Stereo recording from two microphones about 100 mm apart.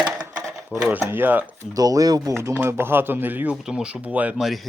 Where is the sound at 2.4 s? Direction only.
25° right (ahead or behind).